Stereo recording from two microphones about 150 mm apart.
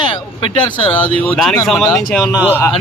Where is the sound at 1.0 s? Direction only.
10° left (ahead or behind).